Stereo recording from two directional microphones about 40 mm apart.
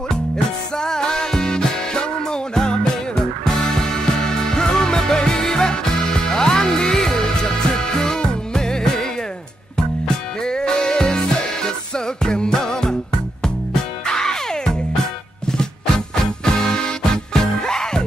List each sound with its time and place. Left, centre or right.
0.7 s music: centre
3.4 s music: centre
14.0 s music: centre
16.4 s music: centre